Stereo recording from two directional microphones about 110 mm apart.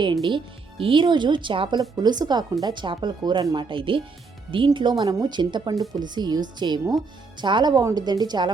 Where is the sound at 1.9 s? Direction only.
40° right (ahead or behind).